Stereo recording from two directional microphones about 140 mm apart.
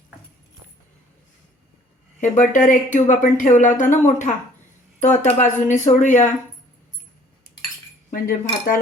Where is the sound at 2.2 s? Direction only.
65° left (ahead or behind).